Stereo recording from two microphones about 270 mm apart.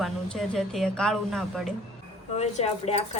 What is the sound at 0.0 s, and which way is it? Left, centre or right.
A woman's voice, centre.